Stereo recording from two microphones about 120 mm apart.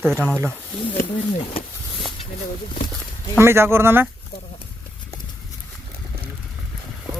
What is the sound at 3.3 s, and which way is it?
Speech, 20° right (ahead or behind).